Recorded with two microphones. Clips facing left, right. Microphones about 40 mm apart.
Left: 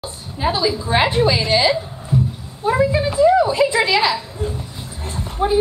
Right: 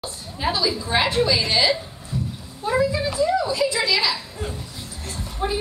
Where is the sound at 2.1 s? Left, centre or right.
Left.